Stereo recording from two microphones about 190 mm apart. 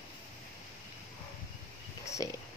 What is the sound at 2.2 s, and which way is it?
Speech, 20° left (ahead or behind).